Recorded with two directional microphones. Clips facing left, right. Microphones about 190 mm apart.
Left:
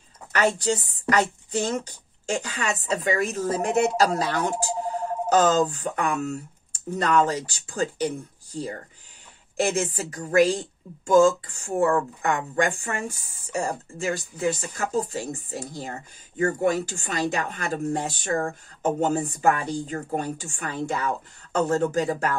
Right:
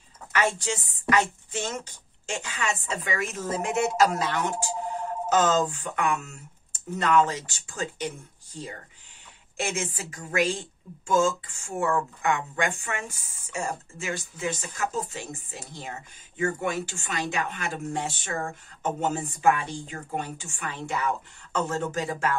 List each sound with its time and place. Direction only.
0.3 s speech: 35° left (ahead or behind)
9.6 s speech: 35° left (ahead or behind)